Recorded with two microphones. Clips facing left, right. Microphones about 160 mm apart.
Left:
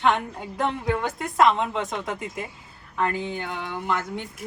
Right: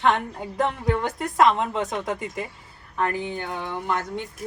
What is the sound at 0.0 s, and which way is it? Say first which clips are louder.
A woman's voice: right 1 dB; centre (ahead or behind).